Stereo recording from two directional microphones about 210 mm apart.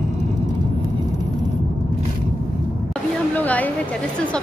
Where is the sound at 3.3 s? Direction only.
5° left (ahead or behind).